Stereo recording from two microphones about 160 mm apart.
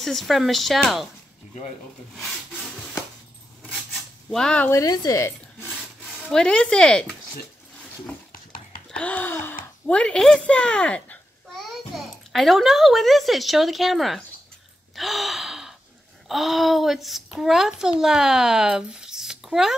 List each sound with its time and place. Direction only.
0.0 s a child's voice: centre (ahead or behind)
3.6 s a sound: centre (ahead or behind); by 5.7 s 20° left (ahead or behind)
6.2 s a child's voice: 5° left (ahead or behind)
8.3 s horse: 60° left (ahead or behind)
8.9 s a sound: 10° left (ahead or behind)
9.8 s a child's voice: 5° left (ahead or behind)
11.9 s a sound: centre (ahead or behind)
12.3 s a child's voice: centre (ahead or behind)
15.0 s gasp: centre (ahead or behind)
16.3 s a child's voice: centre (ahead or behind)